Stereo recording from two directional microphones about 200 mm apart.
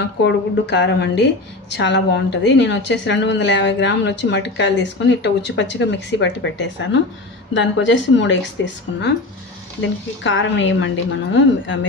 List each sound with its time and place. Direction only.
0.0 s a woman's voice: 60° left (ahead or behind)